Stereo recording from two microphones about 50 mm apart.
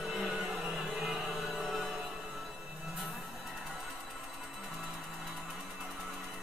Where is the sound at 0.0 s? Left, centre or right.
Centre.